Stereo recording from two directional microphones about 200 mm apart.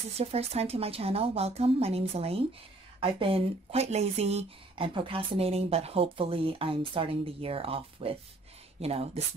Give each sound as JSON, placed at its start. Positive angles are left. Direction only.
{"t": 0.2, "sound": "a woman's voice", "side_deg": -30}